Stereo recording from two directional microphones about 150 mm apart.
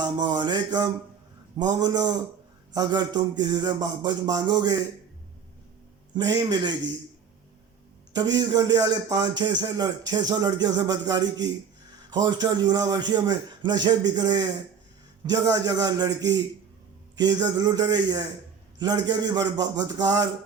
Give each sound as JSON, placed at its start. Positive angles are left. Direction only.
{"t": 0.0, "sound": "a man's voice", "side_deg": -30}
{"t": 6.1, "sound": "a man's voice", "side_deg": -25}
{"t": 8.1, "sound": "a man's voice", "side_deg": -25}